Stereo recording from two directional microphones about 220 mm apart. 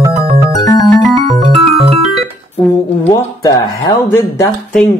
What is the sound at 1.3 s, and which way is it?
Music, 30° right (ahead or behind).